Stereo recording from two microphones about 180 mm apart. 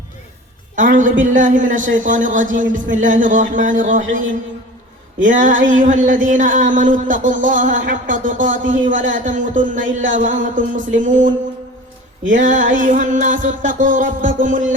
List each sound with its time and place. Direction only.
0.8 s speech: 45° right (ahead or behind)
5.2 s speech: 45° right (ahead or behind)
8.6 s a man's voice: 90° right
9.0 s speech: 45° right (ahead or behind)
9.8 s a man's voice: 90° right
10.4 s speech: 45° right (ahead or behind)